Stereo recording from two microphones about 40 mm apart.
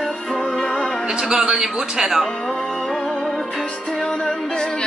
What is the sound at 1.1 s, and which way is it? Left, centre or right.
Speech, centre.